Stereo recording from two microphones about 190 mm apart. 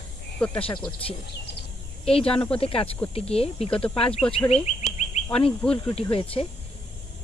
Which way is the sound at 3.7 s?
5° left (ahead or behind).